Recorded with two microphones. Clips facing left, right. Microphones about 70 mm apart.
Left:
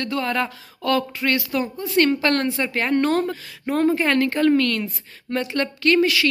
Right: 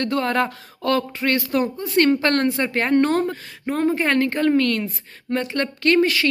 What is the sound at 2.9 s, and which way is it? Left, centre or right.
Speech, right.